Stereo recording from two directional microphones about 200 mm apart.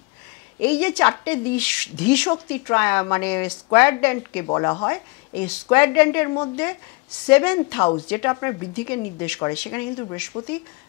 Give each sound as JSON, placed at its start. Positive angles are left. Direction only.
{"t": 0.6, "sound": "speech", "side_deg": 10}